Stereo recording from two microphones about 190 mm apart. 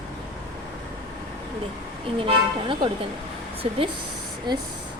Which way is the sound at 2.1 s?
25° right (ahead or behind).